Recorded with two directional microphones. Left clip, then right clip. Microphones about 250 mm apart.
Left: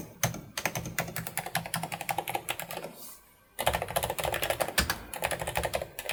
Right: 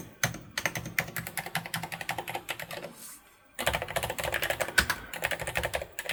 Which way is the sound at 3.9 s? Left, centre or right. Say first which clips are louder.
Left 1 dB; centre.